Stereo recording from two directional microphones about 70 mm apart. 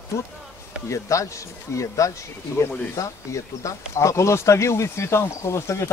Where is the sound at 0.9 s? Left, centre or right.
Left.